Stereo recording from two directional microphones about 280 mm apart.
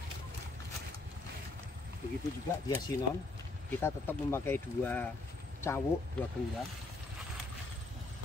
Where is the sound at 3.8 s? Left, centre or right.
Centre.